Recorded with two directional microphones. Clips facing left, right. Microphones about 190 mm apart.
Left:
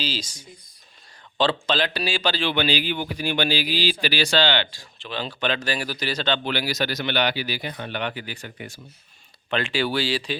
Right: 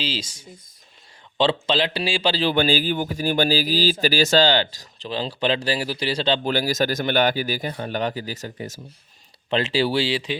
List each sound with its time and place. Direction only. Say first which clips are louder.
0.0 s a man's voice: right 1 dB; 25° right (ahead or behind)